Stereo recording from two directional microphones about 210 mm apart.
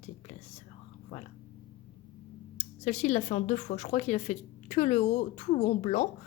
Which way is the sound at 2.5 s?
30° left (ahead or behind).